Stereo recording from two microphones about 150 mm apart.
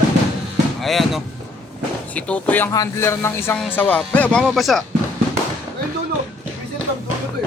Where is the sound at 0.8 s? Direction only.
Centre (ahead or behind).